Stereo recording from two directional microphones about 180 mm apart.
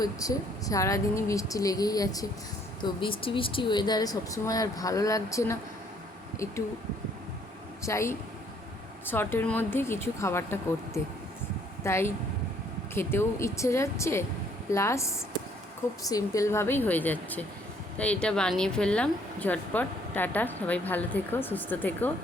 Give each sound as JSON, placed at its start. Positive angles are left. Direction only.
{"t": 0.0, "sound": "speech", "side_deg": 20}
{"t": 7.8, "sound": "speech", "side_deg": 15}